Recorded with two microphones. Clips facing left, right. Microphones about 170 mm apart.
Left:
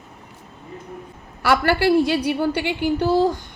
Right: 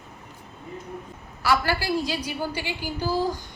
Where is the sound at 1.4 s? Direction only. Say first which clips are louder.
Left 5 dB; 60° left (ahead or behind).